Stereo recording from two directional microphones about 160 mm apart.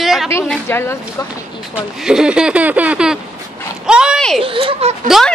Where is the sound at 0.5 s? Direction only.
15° left (ahead or behind).